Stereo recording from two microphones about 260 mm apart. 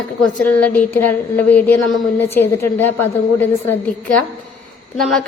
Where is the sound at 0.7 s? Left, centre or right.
Centre.